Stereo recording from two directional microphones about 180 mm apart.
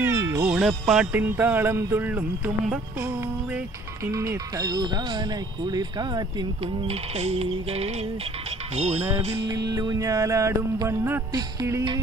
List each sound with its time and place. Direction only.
0.0 s music: 20° right (ahead or behind)
0.5 s music: 5° right (ahead or behind)
3.5 s speech: 15° right (ahead or behind); by 7.9 s 35° right (ahead or behind)
8.7 s music: 40° right (ahead or behind)
9.5 s speech: 20° right (ahead or behind)